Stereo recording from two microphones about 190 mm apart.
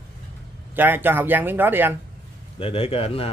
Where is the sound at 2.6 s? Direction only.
30° left (ahead or behind).